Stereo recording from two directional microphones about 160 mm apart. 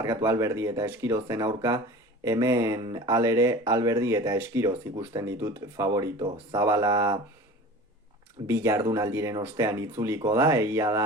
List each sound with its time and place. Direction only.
0.0 s speech: 20° right (ahead or behind)
8.4 s speech: 15° right (ahead or behind)